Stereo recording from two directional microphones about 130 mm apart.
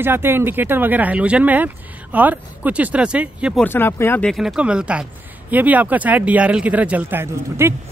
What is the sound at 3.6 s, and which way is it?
Speech, 15° left (ahead or behind).